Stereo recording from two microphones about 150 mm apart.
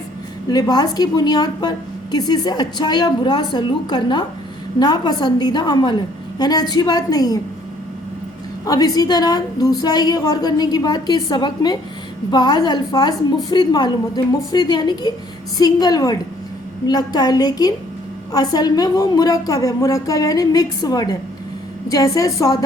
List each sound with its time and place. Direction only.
0.5 s a woman's voice: 25° left (ahead or behind)
8.6 s a woman's voice: 25° left (ahead or behind)